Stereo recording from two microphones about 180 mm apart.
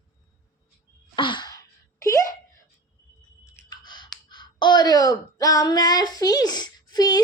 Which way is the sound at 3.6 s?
25° left (ahead or behind).